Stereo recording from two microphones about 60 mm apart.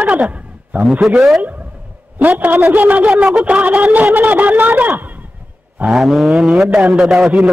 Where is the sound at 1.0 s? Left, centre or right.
Centre.